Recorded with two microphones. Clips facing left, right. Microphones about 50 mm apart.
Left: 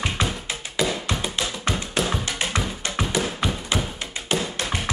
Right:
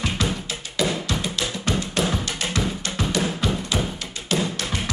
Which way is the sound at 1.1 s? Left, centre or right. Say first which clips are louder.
Even; left.